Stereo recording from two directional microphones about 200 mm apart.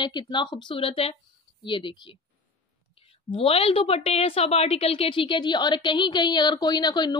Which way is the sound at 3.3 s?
30° left (ahead or behind).